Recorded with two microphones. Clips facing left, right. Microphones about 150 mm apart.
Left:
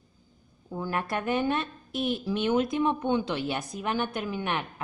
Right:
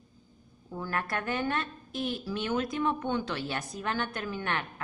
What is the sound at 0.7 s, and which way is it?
Speech, 15° left (ahead or behind).